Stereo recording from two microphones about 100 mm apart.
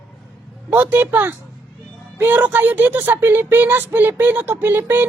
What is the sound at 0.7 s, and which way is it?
Music, 15° right (ahead or behind).